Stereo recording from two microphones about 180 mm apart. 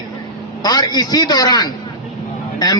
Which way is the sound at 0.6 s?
20° left (ahead or behind).